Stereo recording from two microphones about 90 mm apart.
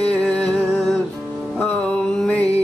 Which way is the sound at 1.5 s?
15° left (ahead or behind).